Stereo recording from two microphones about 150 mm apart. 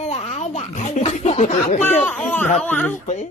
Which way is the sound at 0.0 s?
50° left (ahead or behind).